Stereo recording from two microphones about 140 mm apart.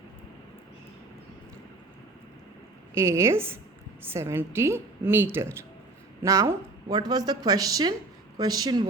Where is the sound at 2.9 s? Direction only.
20° right (ahead or behind).